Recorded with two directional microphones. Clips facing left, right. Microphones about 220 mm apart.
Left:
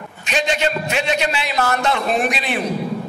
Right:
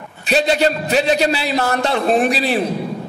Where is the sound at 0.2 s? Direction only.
35° right (ahead or behind).